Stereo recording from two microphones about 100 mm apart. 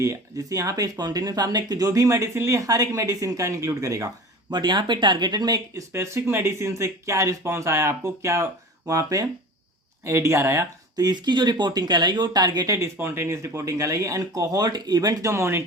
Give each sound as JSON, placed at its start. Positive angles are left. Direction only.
{"t": 0.0, "sound": "speech", "side_deg": -35}
{"t": 4.5, "sound": "speech", "side_deg": -50}
{"t": 10.9, "sound": "speech", "side_deg": -45}